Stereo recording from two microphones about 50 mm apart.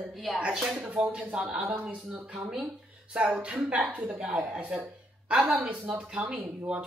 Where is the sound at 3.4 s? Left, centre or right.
Right.